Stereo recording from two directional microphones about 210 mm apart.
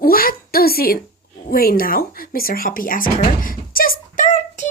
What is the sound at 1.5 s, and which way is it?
Speech, 45° left (ahead or behind).